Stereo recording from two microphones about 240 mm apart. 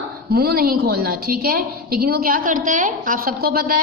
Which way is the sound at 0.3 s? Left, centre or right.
Right.